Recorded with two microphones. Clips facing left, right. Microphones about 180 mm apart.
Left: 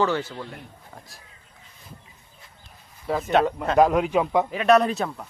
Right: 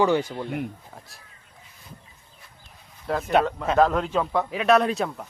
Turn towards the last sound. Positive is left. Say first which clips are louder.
# left 1 dB
turn(degrees=0)  # may be behind; listen again after turning